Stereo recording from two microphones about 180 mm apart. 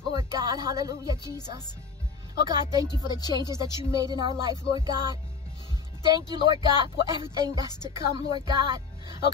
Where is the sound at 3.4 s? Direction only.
25° left (ahead or behind).